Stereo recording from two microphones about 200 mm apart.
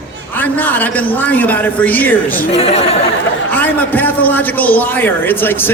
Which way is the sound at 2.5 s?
30° left (ahead or behind).